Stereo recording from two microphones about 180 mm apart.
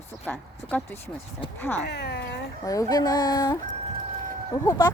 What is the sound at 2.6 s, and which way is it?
Speech, 20° left (ahead or behind).